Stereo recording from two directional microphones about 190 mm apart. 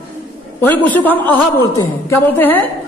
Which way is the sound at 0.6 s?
10° left (ahead or behind).